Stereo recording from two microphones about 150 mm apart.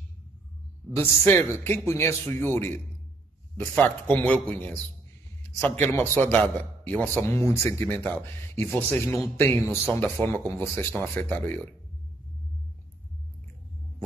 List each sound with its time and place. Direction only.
0.9 s a man's voice: 15° left (ahead or behind)
5.9 s a man's voice: 15° left (ahead or behind)